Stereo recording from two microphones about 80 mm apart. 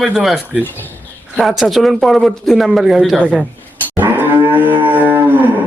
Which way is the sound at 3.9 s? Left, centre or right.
Right.